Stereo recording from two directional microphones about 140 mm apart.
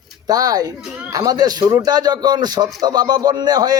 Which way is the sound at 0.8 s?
5° right (ahead or behind).